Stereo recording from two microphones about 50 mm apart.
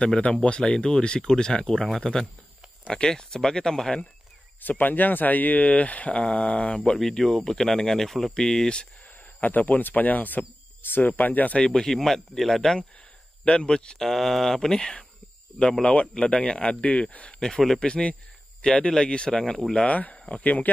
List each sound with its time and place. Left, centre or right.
0.0 s speech: centre
1.7 s speech: centre
4.6 s speech: left
7.0 s speech: centre
9.4 s speech: left
11.5 s speech: centre
14.0 s speech: centre; by 17.4 s left
17.4 s speech: centre
17.7 s speech: left
19.9 s speech: left